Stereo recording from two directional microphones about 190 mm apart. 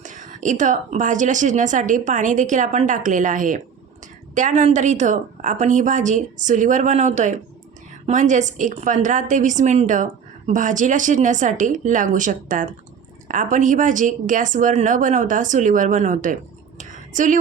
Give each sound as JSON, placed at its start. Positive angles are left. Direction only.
{"t": 0.0, "sound": "a woman's voice", "side_deg": -40}